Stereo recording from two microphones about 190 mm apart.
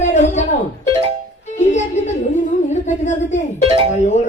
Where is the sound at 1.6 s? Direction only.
40° left (ahead or behind).